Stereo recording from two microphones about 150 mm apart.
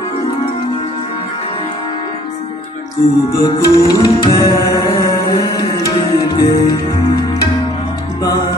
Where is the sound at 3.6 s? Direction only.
25° left (ahead or behind).